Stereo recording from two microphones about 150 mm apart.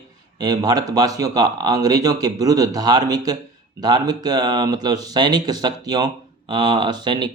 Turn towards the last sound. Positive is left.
turn(degrees=-30)  # may be behind; listen again after turning